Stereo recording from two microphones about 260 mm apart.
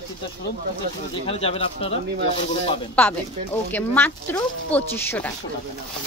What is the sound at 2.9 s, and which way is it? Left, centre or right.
Speech, centre.